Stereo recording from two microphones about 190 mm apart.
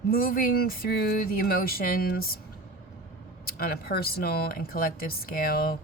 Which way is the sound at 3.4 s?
50° left (ahead or behind).